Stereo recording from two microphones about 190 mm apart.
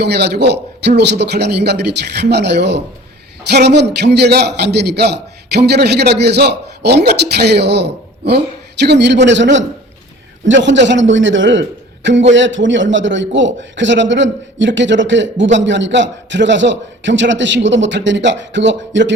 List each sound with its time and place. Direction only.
0.0 s a man's voice: 60° right (ahead or behind)
11.1 s a man's voice: 85° right